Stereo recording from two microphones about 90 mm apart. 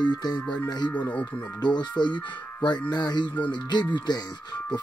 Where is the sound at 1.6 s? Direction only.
55° left (ahead or behind).